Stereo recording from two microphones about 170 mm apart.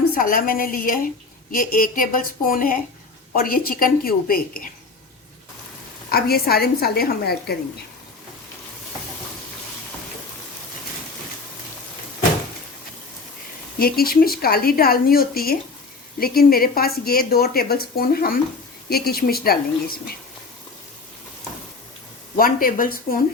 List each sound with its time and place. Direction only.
0.1 s a woman's voice: 55° left (ahead or behind)
6.1 s a woman's voice: 65° left (ahead or behind)
13.7 s a woman's voice: 65° left (ahead or behind)
22.4 s a woman's voice: 55° left (ahead or behind)